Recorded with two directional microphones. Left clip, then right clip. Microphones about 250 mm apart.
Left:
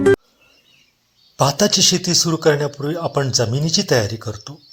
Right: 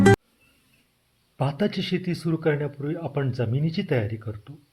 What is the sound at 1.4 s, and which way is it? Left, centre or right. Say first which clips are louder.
A man's voice: left 12 dB; centre.